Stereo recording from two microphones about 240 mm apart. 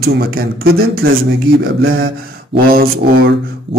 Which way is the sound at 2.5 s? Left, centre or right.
Right.